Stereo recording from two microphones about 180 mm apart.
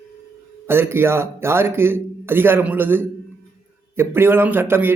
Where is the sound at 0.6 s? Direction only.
15° right (ahead or behind).